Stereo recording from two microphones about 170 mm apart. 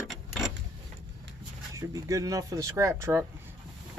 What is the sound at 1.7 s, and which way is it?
Speech, 20° right (ahead or behind).